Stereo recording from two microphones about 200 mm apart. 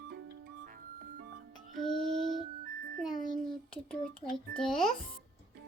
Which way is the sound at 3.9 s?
5° left (ahead or behind).